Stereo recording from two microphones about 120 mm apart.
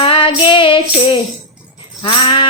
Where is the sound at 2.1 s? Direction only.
45° left (ahead or behind).